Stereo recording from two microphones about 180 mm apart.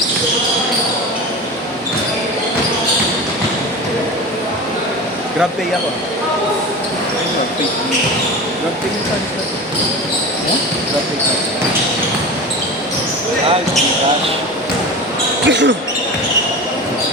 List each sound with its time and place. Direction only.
15.4 s speech: 80° right